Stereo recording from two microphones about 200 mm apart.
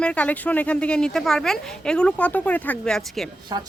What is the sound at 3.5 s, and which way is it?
Speech, 20° right (ahead or behind).